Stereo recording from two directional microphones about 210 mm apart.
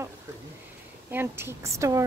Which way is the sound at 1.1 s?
10° right (ahead or behind).